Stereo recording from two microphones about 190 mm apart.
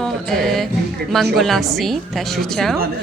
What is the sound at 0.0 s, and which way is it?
Music, centre (ahead or behind).